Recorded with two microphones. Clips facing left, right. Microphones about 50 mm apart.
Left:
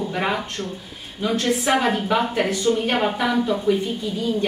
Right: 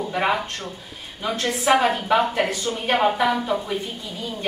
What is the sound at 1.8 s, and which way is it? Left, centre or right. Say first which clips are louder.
A woman's voice: right 1 dB; centre.